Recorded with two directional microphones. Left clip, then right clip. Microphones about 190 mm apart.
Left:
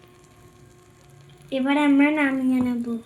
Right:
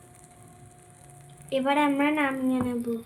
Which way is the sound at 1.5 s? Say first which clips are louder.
Left 3 dB; 50° left (ahead or behind).